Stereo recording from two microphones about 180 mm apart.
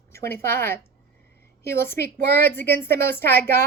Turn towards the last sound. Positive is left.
turn(degrees=10)  # may be behind; listen again after turning